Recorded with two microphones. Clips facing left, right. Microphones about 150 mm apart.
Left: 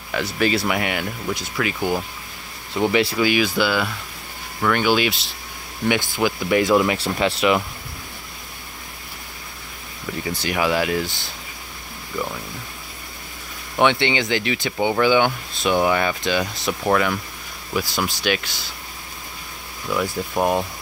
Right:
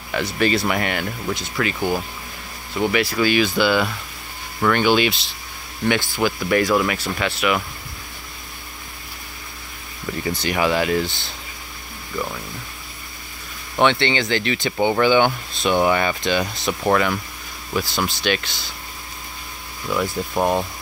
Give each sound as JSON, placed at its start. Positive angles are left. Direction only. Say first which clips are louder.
{"t": 0.1, "sound": "speech", "louder": "right 1 dB", "side_deg": 5}
{"t": 2.7, "sound": "speech", "louder": "left 1 dB", "side_deg": 25}
{"t": 3.2, "sound": "speech", "louder": "right 1 dB", "side_deg": 10}
{"t": 5.9, "sound": "speech", "louder": "even", "side_deg": 15}
{"t": 7.0, "sound": "speech", "louder": "left 3 dB", "side_deg": 30}
{"t": 10.4, "sound": "speech", "louder": "right 1 dB", "side_deg": 5}
{"t": 13.7, "sound": "speech", "louder": "even", "side_deg": 10}
{"t": 19.9, "sound": "speech", "louder": "right 1 dB", "side_deg": 0}